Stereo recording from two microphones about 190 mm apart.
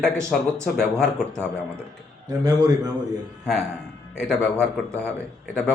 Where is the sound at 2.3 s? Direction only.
20° right (ahead or behind).